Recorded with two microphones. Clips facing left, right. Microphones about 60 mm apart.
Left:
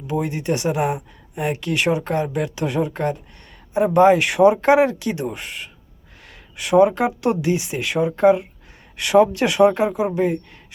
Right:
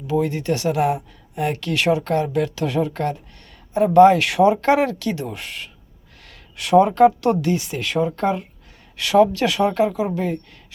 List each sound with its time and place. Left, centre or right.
0.1 s speech: centre